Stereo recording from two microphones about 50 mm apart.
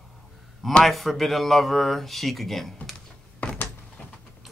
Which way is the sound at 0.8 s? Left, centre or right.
Centre.